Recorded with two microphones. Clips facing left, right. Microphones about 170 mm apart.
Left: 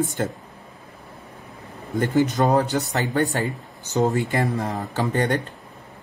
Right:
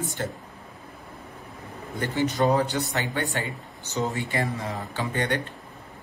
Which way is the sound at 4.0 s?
45° left (ahead or behind).